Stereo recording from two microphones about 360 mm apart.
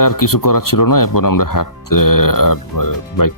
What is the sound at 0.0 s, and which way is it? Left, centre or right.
Speech, left.